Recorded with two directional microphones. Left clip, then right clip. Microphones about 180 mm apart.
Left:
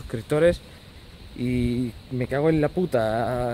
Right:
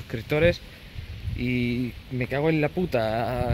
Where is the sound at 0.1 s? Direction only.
15° left (ahead or behind).